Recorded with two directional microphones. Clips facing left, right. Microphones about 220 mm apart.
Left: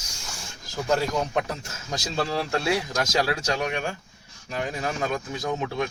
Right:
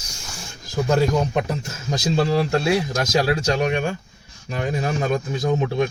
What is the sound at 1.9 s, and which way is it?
Speech, 15° right (ahead or behind).